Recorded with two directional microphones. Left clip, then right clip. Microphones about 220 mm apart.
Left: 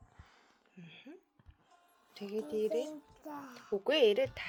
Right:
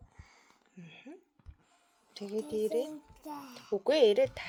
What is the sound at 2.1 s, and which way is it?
Speech, 10° right (ahead or behind).